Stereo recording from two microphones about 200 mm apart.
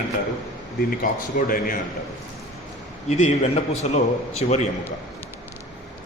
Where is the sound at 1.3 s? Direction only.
45° left (ahead or behind).